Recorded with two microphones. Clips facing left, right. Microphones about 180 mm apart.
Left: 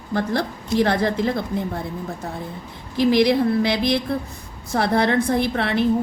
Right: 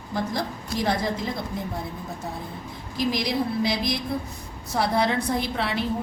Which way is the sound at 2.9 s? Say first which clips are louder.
Left 9 dB; 60° left (ahead or behind).